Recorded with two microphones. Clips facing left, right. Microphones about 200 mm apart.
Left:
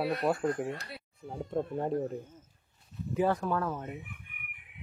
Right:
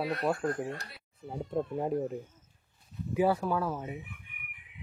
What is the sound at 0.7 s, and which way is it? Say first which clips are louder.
Speech: left 2 dB; 60° left (ahead or behind).